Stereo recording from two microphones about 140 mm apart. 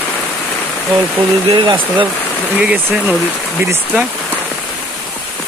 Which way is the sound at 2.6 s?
10° right (ahead or behind).